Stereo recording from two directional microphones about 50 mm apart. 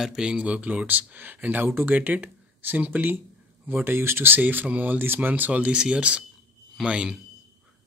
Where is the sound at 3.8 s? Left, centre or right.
Right; by 7.2 s centre.